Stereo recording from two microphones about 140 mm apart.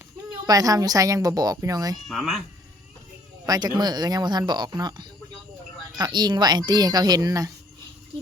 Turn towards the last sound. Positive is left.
turn(degrees=-25)  # may be behind; listen again after turning